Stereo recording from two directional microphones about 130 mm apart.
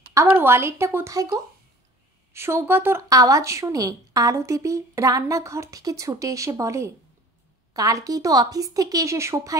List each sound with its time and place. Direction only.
0.1 s a woman's voice: 20° right (ahead or behind)